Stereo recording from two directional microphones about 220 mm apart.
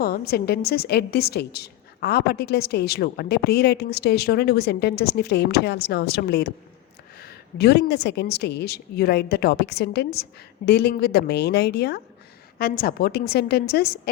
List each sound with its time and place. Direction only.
0.0 s a woman's voice: 45° left (ahead or behind)